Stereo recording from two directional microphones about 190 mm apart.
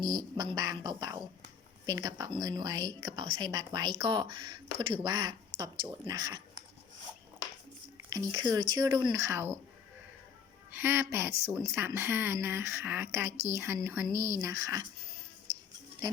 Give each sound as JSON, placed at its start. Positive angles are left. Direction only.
{"t": 0.0, "sound": "a woman's voice", "side_deg": -20}
{"t": 8.1, "sound": "a woman's voice", "side_deg": -20}
{"t": 10.7, "sound": "speech", "side_deg": -10}